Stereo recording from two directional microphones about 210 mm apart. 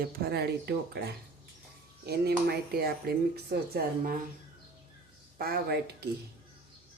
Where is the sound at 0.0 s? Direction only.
45° right (ahead or behind).